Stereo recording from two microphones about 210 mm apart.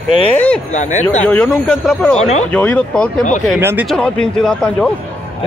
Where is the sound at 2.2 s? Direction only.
30° left (ahead or behind).